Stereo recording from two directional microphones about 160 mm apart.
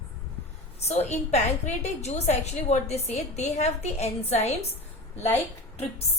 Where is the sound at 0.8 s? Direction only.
40° left (ahead or behind).